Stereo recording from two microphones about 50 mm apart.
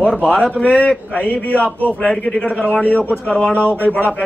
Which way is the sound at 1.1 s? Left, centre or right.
Left.